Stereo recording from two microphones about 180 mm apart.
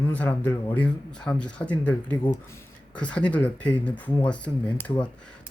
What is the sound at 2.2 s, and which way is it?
Speech, 20° left (ahead or behind).